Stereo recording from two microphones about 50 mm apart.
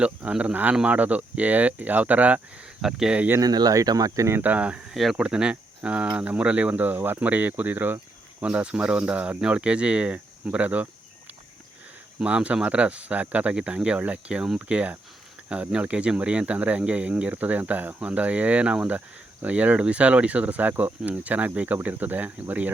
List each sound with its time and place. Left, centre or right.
0.0 s speech: right
0.5 s speech: right
2.8 s speech: centre
3.8 s speech: right
4.4 s speech: right
4.9 s speech: centre
5.1 s speech: centre; by 7.9 s right
8.4 s speech: right
12.2 s speech: right